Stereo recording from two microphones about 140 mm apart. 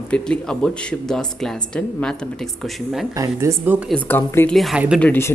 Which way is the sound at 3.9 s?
15° left (ahead or behind).